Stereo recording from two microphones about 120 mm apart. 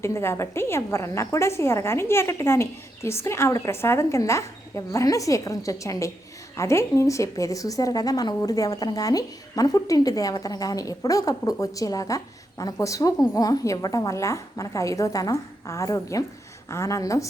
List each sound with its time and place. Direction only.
0.0 s a woman's voice: 20° left (ahead or behind)